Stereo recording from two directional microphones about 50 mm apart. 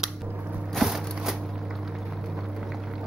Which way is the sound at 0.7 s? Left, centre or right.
Centre.